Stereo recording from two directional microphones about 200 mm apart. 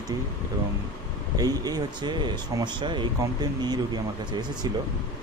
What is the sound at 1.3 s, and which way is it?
Speech, 20° right (ahead or behind).